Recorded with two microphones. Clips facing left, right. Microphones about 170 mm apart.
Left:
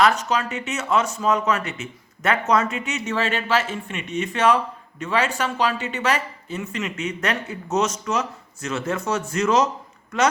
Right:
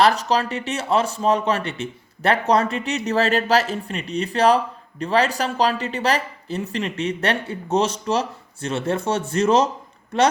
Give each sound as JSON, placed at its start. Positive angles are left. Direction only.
{"t": 0.0, "sound": "speech", "side_deg": -35}